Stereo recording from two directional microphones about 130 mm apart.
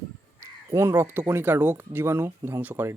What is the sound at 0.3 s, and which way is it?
Speech, 25° right (ahead or behind).